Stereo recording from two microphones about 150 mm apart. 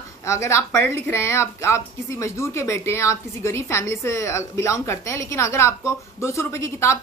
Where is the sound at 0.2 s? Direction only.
20° left (ahead or behind).